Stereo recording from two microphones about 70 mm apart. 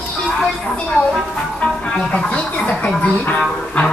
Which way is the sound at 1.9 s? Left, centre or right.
Centre.